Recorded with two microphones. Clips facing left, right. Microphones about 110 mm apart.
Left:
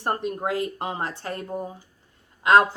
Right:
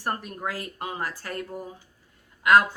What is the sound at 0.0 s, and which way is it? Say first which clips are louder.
Speech: left 4 dB; 25° left (ahead or behind).